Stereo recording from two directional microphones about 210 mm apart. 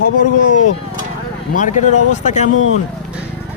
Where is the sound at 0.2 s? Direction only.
35° left (ahead or behind).